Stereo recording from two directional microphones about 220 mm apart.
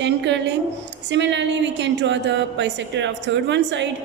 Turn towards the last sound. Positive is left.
turn(degrees=-55)  # may be behind; listen again after turning